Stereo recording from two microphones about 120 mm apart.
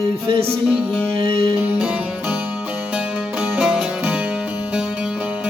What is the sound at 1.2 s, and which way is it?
Music, 50° right (ahead or behind).